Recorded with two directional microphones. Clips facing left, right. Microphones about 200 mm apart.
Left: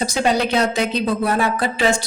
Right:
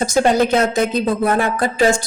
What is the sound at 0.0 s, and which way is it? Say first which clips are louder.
A woman's voice: right 4 dB; 50° right (ahead or behind).